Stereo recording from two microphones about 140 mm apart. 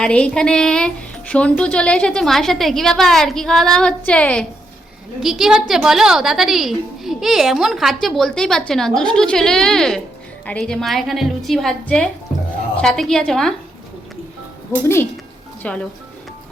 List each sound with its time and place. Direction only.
0.0 s a woman's voice: 5° left (ahead or behind)
5.2 s a woman's voice: 5° right (ahead or behind)
15.6 s speech: 10° left (ahead or behind)